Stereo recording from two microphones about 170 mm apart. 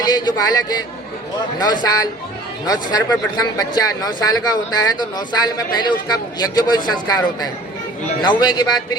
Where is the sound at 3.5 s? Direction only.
20° left (ahead or behind).